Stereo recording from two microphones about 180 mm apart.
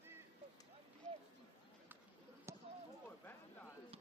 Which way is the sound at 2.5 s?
15° right (ahead or behind).